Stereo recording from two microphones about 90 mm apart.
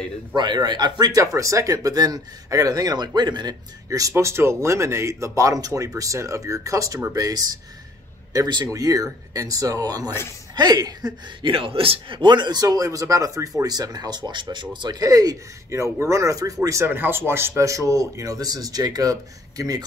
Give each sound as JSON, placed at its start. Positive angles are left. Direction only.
{"t": 0.3, "sound": "a man's voice", "side_deg": -55}
{"t": 1.2, "sound": "speech", "side_deg": -35}
{"t": 4.1, "sound": "a man's voice", "side_deg": -30}
{"t": 11.5, "sound": "a man's voice", "side_deg": -90}
{"t": 15.0, "sound": "speech", "side_deg": -45}
{"t": 16.8, "sound": "speech", "side_deg": -25}